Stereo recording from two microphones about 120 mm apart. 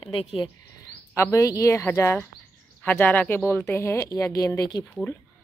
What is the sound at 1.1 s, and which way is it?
A woman's voice, 25° left (ahead or behind).